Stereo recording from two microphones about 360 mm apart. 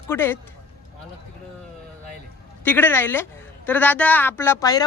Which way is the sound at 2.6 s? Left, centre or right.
Centre.